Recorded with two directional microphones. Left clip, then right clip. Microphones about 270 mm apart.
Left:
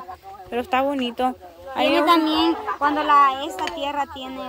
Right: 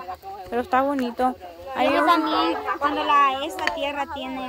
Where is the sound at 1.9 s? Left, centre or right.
Left.